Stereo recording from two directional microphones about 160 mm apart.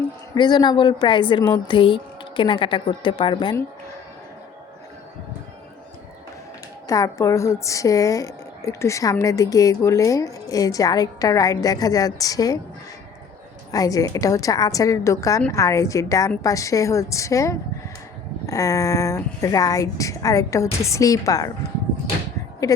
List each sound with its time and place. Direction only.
0.3 s a woman's voice: 25° left (ahead or behind)
6.8 s a woman's voice: 20° left (ahead or behind)
13.7 s a woman's voice: 20° left (ahead or behind)
22.6 s a woman's voice: 20° left (ahead or behind)